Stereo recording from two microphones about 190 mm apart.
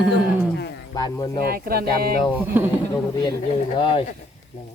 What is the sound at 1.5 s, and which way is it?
Music, 50° right (ahead or behind).